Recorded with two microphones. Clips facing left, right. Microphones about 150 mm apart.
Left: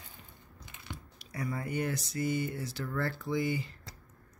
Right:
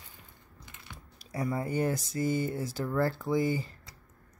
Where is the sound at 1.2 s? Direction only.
30° right (ahead or behind).